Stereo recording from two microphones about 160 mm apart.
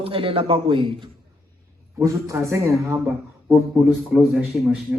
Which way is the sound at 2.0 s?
20° right (ahead or behind).